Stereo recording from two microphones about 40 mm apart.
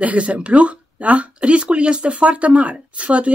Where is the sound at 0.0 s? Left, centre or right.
Right.